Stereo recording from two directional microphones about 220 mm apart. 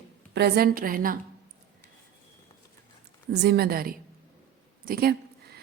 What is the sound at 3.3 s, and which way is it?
A woman's voice, 45° right (ahead or behind).